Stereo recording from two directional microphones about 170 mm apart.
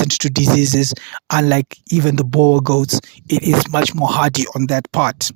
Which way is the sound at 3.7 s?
65° right (ahead or behind).